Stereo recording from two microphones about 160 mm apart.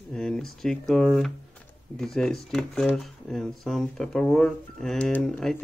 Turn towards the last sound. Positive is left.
turn(degrees=5)  # may be behind; listen again after turning